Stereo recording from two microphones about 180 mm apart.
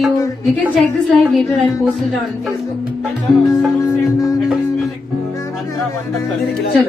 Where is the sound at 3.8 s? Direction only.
15° left (ahead or behind).